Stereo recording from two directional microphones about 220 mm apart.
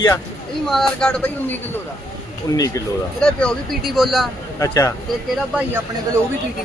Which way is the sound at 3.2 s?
5° left (ahead or behind).